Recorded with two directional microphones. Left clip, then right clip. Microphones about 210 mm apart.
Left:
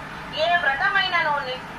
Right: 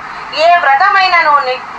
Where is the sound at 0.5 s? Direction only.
40° right (ahead or behind).